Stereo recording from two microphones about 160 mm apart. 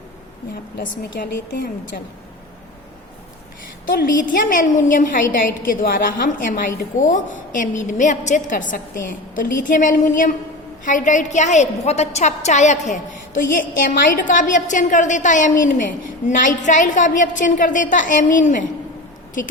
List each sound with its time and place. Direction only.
1.2 s speech: 70° left (ahead or behind)
3.8 s a woman's voice: 60° left (ahead or behind)